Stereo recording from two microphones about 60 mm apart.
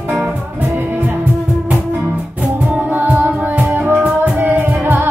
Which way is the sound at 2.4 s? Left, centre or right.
Centre.